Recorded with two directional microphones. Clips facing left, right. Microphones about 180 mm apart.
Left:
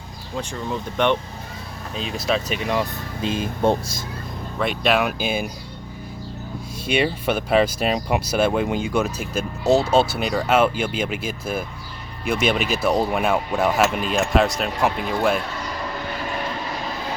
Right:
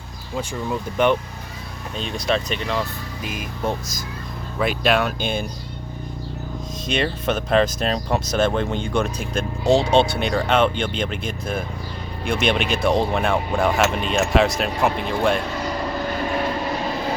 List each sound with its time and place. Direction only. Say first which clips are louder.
0.7 s speech: right 2 dB; 5° right (ahead or behind); by 2.8 s 10° left (ahead or behind)
3.2 s speech: left 7 dB; 25° left (ahead or behind)
4.6 s speech: right 1 dB; centre (ahead or behind)
6.8 s speech: left 2 dB; 10° left (ahead or behind)